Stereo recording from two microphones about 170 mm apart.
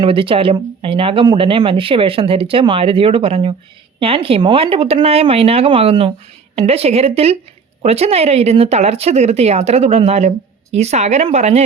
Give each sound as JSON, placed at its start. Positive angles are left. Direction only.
{"t": 0.0, "sound": "speech", "side_deg": -30}